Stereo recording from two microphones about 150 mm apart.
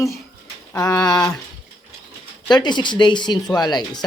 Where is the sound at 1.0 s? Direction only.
25° left (ahead or behind).